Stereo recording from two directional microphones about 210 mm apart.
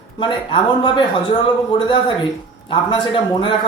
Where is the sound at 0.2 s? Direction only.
20° left (ahead or behind).